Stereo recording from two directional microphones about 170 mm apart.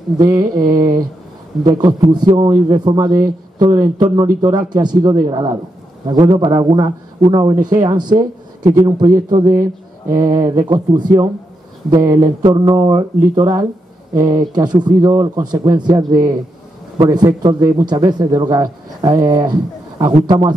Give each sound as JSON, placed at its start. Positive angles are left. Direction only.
{"t": 0.2, "sound": "a man's voice", "side_deg": -20}